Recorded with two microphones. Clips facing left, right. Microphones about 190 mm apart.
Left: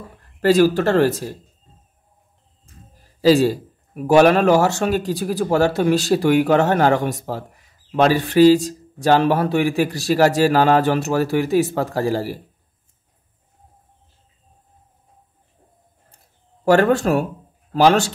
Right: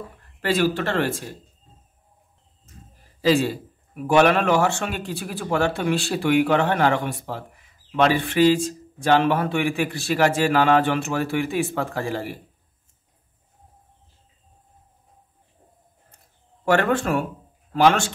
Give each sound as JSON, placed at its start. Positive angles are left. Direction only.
{"t": 0.4, "sound": "a man's voice", "side_deg": 40}
{"t": 3.2, "sound": "a man's voice", "side_deg": 40}
{"t": 16.6, "sound": "a man's voice", "side_deg": 40}